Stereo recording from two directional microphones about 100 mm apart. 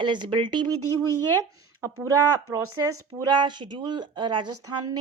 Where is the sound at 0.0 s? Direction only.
50° right (ahead or behind).